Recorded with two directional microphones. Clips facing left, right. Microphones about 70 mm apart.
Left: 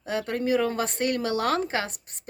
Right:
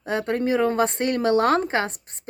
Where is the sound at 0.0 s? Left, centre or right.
Right.